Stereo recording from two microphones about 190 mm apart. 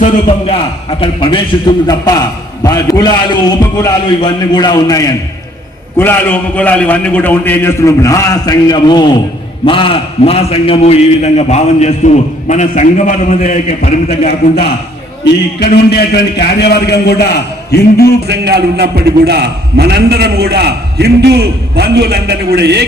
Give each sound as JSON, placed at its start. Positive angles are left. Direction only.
{"t": 0.0, "sound": "a man's voice", "side_deg": 30}
{"t": 15.2, "sound": "a man's voice", "side_deg": 60}
{"t": 18.3, "sound": "a man's voice", "side_deg": -60}